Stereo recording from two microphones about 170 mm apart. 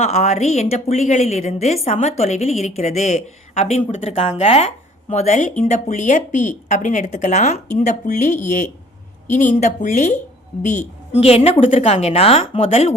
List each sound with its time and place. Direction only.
0.0 s a woman's voice: 40° left (ahead or behind)